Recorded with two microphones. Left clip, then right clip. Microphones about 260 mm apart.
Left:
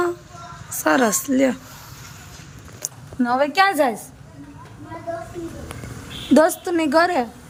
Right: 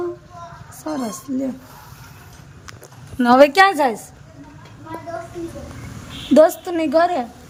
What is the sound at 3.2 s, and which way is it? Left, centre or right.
Speech, right.